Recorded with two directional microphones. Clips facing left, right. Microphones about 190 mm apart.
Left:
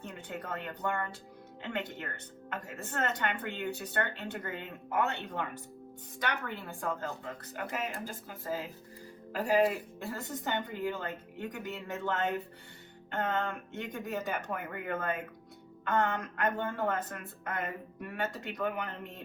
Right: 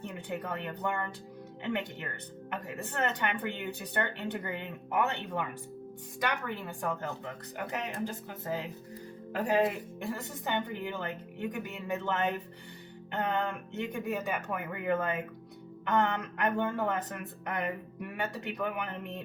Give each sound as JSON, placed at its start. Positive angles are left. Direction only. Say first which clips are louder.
{"t": 0.1, "sound": "speech", "louder": "right 2 dB", "side_deg": -15}
{"t": 7.5, "sound": "speech", "louder": "right 1 dB", "side_deg": -20}
{"t": 13.1, "sound": "music", "louder": "right 1 dB", "side_deg": -15}
{"t": 13.9, "sound": "speech", "louder": "right 1 dB", "side_deg": -15}